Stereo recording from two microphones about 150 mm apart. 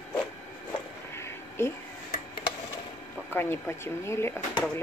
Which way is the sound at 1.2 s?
15° left (ahead or behind).